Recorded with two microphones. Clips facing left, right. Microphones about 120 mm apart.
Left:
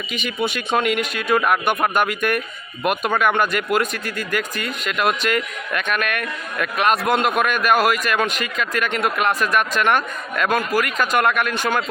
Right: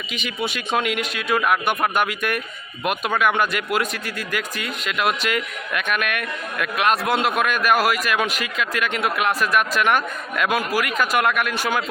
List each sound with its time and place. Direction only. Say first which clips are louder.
0.1 s speech: left 3 dB; centre (ahead or behind)